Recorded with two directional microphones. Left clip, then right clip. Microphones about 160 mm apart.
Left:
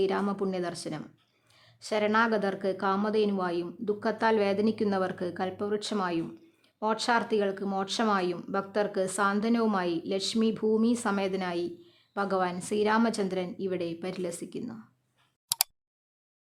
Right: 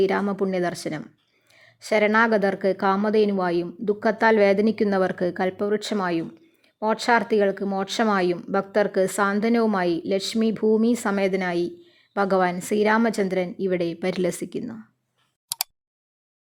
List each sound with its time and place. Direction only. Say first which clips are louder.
0.0 s a woman's voice: right 6 dB; 30° right (ahead or behind)
14.6 s speech: right 5 dB; 20° right (ahead or behind)
15.4 s a sound: even; centre (ahead or behind)